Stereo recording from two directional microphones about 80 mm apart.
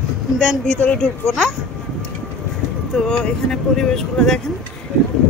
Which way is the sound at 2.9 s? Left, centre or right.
Centre.